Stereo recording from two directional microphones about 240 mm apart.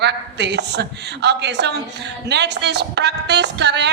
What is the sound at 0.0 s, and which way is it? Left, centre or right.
A woman's voice, right.